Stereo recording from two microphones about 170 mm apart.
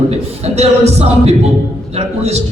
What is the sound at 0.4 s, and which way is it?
A man's voice, 40° right (ahead or behind).